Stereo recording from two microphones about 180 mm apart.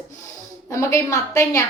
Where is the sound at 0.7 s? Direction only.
15° left (ahead or behind).